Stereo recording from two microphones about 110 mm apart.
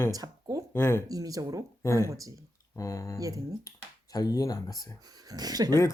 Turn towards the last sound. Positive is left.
turn(degrees=-35)  # may be behind; listen again after turning